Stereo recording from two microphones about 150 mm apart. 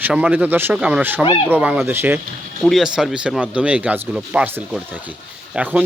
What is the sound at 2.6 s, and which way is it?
Speech, centre (ahead or behind).